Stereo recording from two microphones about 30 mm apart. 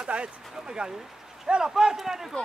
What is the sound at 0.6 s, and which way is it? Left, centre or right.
Speech, right.